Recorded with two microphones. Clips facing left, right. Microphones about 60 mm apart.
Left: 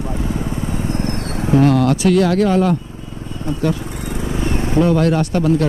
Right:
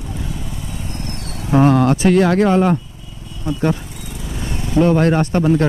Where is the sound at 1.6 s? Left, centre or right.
Right.